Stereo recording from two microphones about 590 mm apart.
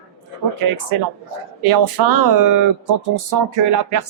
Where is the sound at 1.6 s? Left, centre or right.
Right.